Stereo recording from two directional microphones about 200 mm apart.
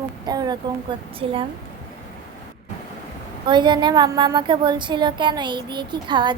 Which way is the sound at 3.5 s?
20° right (ahead or behind).